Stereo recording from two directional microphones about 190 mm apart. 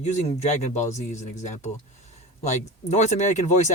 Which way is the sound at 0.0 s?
35° left (ahead or behind).